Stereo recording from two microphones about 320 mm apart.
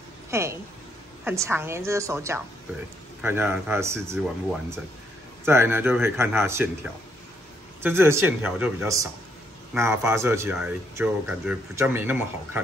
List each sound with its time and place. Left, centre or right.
0.3 s a woman's voice: centre
5.4 s speech: centre